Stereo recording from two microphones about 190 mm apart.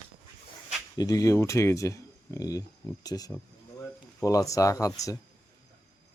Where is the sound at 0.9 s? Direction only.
20° left (ahead or behind).